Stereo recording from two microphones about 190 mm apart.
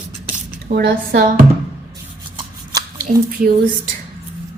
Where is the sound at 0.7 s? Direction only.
60° right (ahead or behind).